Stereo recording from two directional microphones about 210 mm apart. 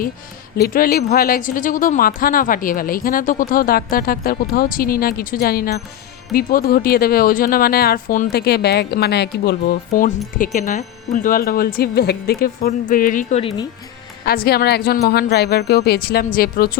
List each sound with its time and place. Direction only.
0.5 s speech: 45° left (ahead or behind)